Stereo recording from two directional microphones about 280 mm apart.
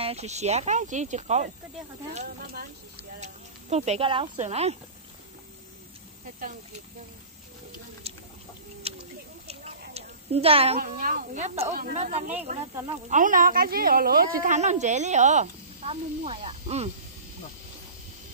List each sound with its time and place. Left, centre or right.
0.0 s a woman's voice: right
3.7 s a woman's voice: right
8.0 s chicken: right
9.9 s a woman's voice: right
12.7 s speech: centre
13.1 s a woman's voice: right